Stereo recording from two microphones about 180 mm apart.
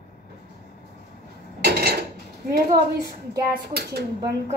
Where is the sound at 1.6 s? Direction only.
65° right (ahead or behind).